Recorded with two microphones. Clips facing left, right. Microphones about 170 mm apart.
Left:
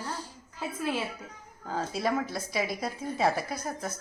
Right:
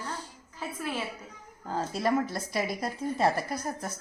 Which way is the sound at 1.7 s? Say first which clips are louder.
Right 2 dB; centre (ahead or behind).